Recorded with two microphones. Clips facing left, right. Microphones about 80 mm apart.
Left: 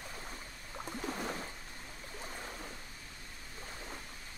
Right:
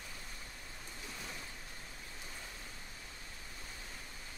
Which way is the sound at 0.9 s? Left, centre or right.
Left.